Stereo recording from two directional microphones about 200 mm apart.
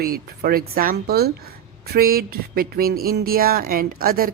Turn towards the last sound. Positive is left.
turn(degrees=-45)  # may be behind; listen again after turning